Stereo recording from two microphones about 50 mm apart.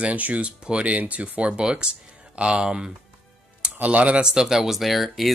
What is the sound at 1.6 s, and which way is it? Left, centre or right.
Speech, centre.